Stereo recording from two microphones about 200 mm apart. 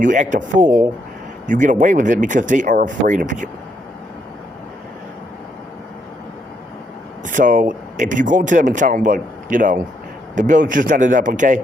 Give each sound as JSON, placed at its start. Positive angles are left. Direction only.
{"t": 0.0, "sound": "speech", "side_deg": -40}
{"t": 7.3, "sound": "speech", "side_deg": -40}